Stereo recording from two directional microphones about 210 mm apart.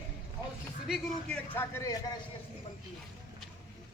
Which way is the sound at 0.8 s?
Centre (ahead or behind).